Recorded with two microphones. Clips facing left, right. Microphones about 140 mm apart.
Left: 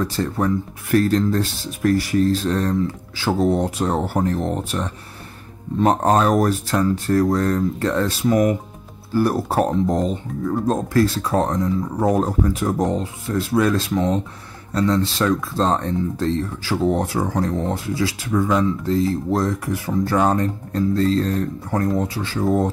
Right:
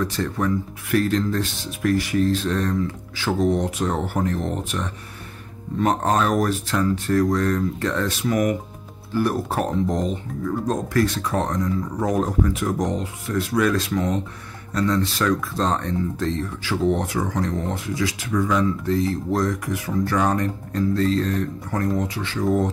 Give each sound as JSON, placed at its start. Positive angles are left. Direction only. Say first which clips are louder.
{"t": 0.0, "sound": "speech", "louder": "left 2 dB", "side_deg": 35}